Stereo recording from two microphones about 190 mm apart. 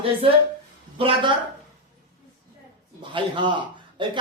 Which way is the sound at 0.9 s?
30° right (ahead or behind).